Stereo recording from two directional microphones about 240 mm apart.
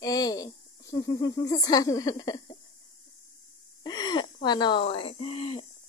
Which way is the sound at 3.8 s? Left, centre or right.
Centre.